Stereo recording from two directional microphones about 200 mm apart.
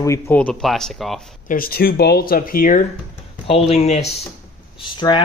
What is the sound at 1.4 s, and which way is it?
Speech, 45° left (ahead or behind).